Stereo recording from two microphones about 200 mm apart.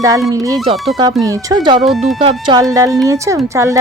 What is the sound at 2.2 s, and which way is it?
A woman's voice, 20° right (ahead or behind).